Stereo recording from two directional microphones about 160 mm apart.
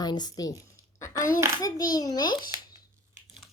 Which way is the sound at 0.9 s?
20° left (ahead or behind).